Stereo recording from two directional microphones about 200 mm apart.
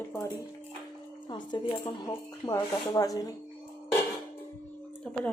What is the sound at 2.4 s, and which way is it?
Speech, 20° left (ahead or behind).